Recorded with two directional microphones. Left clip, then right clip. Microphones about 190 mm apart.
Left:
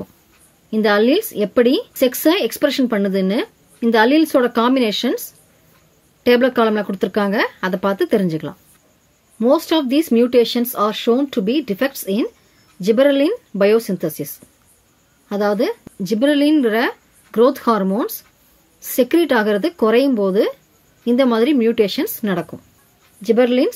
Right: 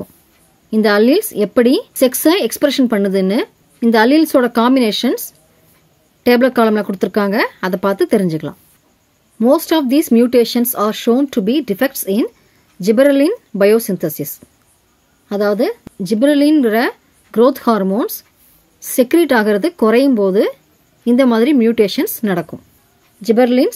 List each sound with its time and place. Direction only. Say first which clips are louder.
0.7 s speech: right 3 dB; 30° right (ahead or behind)